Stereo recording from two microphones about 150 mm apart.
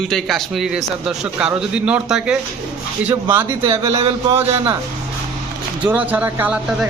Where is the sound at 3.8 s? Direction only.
40° right (ahead or behind).